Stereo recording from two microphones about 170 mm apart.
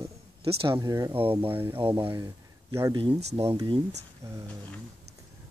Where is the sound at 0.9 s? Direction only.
20° right (ahead or behind).